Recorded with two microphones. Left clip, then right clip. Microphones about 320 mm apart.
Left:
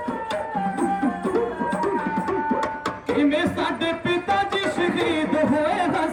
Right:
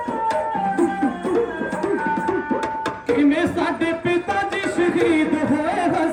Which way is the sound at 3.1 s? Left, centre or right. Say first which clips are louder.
Right 2 dB; right.